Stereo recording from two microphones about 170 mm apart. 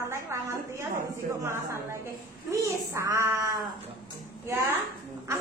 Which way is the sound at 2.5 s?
20° right (ahead or behind).